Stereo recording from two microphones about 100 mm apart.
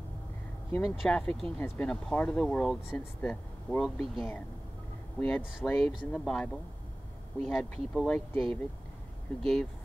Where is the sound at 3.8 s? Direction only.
Centre (ahead or behind).